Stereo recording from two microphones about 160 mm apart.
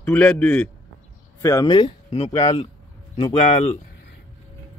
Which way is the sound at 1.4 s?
20° left (ahead or behind).